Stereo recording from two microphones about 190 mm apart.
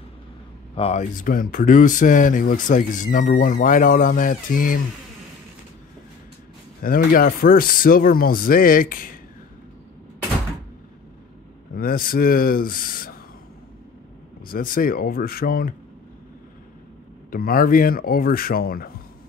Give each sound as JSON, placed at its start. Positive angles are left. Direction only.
{"t": 0.7, "sound": "speech", "side_deg": 35}
{"t": 6.8, "sound": "speech", "side_deg": 50}
{"t": 11.7, "sound": "speech", "side_deg": 50}
{"t": 14.5, "sound": "speech", "side_deg": 50}
{"t": 17.3, "sound": "speech", "side_deg": 50}